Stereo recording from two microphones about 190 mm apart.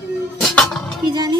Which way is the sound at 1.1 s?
20° right (ahead or behind).